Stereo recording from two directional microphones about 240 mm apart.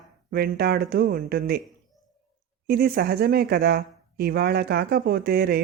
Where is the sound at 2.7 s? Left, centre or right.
Right.